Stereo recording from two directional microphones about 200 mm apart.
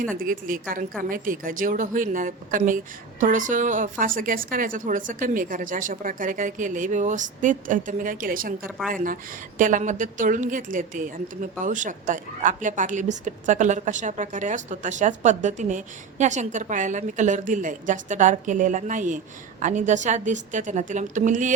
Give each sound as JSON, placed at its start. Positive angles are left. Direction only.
{"t": 0.2, "sound": "a woman's voice", "side_deg": -45}